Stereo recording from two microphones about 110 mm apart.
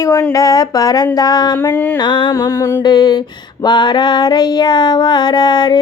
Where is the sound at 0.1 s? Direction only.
30° left (ahead or behind).